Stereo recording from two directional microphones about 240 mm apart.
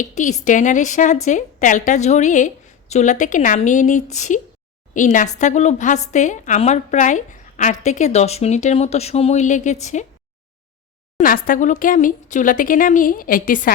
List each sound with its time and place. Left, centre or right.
0.0 s a woman's voice: left
11.2 s speech: left